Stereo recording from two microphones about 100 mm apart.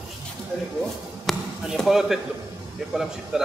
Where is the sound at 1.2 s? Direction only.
Centre (ahead or behind).